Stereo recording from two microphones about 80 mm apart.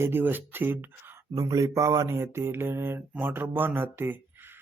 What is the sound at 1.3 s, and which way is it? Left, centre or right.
Mantra, right.